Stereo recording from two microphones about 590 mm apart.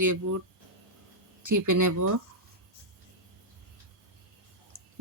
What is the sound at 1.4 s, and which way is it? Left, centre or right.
Speech, right.